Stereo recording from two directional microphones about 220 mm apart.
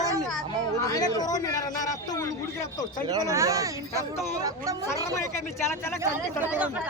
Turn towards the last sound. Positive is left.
turn(degrees=-5)  # may be behind; listen again after turning